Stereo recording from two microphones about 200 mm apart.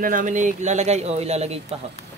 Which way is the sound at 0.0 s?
40° right (ahead or behind).